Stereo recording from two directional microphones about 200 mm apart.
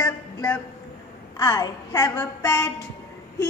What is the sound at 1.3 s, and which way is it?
A man's voice, 20° left (ahead or behind).